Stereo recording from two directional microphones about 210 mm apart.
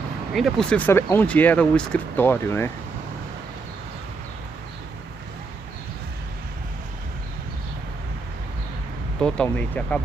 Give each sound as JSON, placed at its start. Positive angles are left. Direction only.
{"t": 0.3, "sound": "speech", "side_deg": 0}
{"t": 9.2, "sound": "speech", "side_deg": 5}